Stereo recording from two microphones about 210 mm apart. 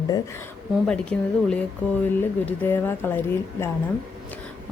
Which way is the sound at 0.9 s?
5° left (ahead or behind).